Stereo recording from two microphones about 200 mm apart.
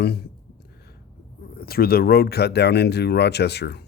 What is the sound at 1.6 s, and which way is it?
Speech, 50° left (ahead or behind).